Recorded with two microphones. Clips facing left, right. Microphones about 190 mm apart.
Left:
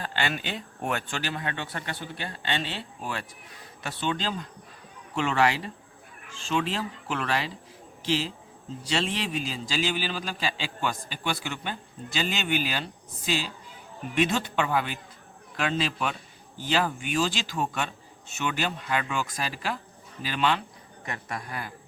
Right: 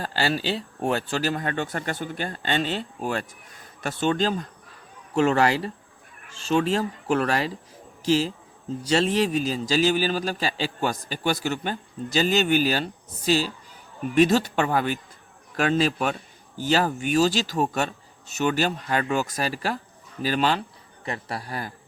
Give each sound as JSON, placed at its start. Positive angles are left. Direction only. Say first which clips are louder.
{"t": 0.0, "sound": "a man's voice", "louder": "right 5 dB", "side_deg": -35}